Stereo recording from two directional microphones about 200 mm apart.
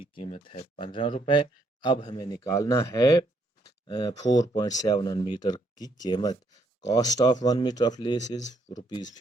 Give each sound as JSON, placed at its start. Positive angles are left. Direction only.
{"t": 0.2, "sound": "speech", "side_deg": 30}